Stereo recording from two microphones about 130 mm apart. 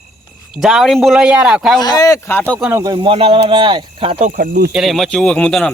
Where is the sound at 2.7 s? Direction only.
30° right (ahead or behind).